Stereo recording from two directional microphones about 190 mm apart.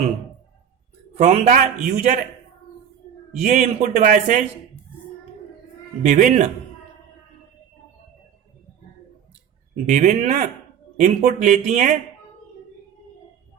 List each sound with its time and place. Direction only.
1.1 s a man's voice: 40° right (ahead or behind)
3.4 s a man's voice: 40° right (ahead or behind)
6.0 s a man's voice: 40° right (ahead or behind)
9.8 s a man's voice: 40° right (ahead or behind)